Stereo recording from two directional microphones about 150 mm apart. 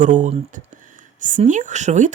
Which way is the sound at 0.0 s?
55° right (ahead or behind).